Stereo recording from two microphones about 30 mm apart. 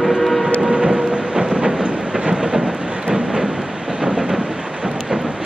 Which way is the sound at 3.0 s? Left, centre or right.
Right.